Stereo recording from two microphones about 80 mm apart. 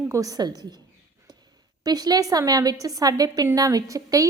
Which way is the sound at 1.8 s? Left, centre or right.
Right.